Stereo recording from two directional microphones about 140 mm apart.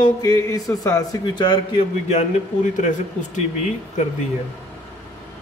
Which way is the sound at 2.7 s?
60° left (ahead or behind).